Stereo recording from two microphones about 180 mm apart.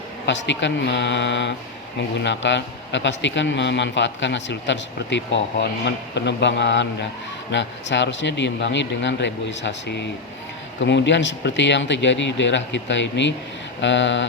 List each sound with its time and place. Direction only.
0.3 s a man's voice: 80° left